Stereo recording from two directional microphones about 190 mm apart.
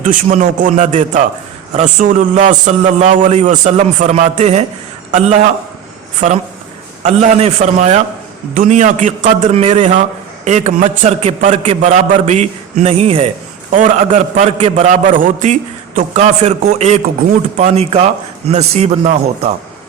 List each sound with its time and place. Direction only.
0.0 s a man's voice: 40° right (ahead or behind)
6.1 s a man's voice: 40° right (ahead or behind)
13.7 s a man's voice: 45° right (ahead or behind)